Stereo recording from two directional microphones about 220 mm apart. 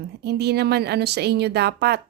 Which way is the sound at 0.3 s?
50° right (ahead or behind).